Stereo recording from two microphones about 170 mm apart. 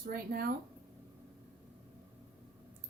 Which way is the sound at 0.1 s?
60° right (ahead or behind).